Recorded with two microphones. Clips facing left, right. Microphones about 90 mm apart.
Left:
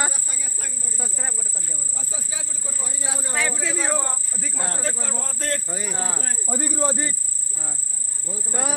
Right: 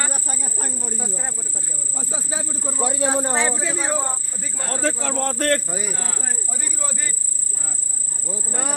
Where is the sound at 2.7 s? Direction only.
70° right (ahead or behind).